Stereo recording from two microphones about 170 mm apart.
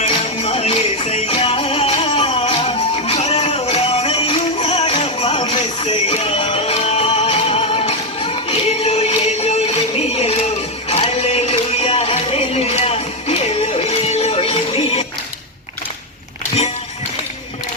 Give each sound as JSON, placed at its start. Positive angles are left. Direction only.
{"t": 0.0, "sound": "music", "side_deg": 40}